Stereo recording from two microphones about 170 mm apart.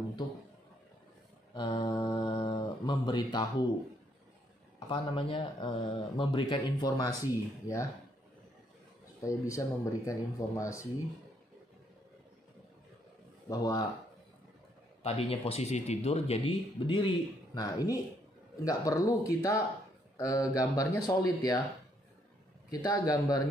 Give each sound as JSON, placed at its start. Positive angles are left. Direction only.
{"t": 1.5, "sound": "mantra", "side_deg": 25}
{"t": 4.7, "sound": "speech", "side_deg": 30}
{"t": 9.2, "sound": "speech", "side_deg": 20}
{"t": 13.5, "sound": "speech", "side_deg": 20}
{"t": 15.0, "sound": "speech", "side_deg": 35}
{"t": 17.6, "sound": "speech", "side_deg": 20}
{"t": 22.7, "sound": "speech", "side_deg": 25}